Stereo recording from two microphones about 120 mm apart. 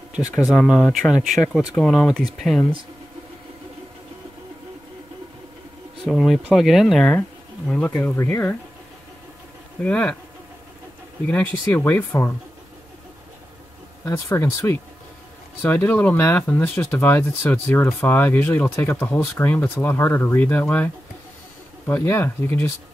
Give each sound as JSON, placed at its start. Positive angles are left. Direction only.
{"t": 0.5, "sound": "speech", "side_deg": 0}
{"t": 6.0, "sound": "speech", "side_deg": 0}
{"t": 9.8, "sound": "speech", "side_deg": 10}
{"t": 11.2, "sound": "speech", "side_deg": 15}
{"t": 14.0, "sound": "speech", "side_deg": 25}